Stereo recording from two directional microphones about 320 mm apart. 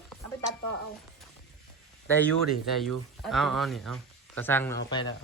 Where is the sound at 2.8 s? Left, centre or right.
Centre.